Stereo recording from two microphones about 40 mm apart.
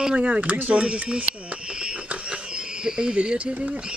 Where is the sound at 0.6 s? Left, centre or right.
Right.